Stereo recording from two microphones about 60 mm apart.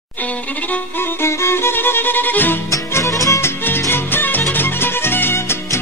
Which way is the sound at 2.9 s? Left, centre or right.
Left.